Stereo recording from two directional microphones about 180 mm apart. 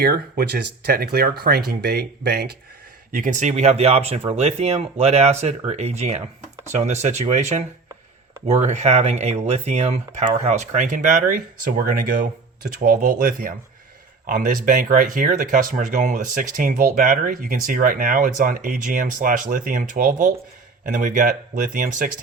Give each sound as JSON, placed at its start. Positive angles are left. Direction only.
{"t": 0.0, "sound": "speech", "side_deg": -55}
{"t": 3.1, "sound": "speech", "side_deg": -45}
{"t": 8.6, "sound": "speech", "side_deg": -40}